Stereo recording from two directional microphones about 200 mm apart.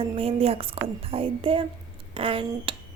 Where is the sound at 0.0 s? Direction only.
30° right (ahead or behind).